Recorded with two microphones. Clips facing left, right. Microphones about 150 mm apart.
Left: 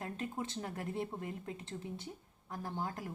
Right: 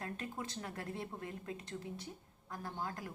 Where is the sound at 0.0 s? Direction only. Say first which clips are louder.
Left 3 dB; 25° left (ahead or behind).